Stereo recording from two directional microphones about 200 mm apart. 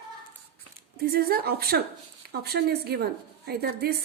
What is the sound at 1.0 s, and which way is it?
A woman's voice, 50° right (ahead or behind).